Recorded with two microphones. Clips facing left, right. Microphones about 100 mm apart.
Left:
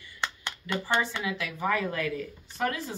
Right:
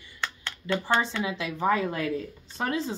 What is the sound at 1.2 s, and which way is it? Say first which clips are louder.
Speech: right 3 dB; 25° right (ahead or behind).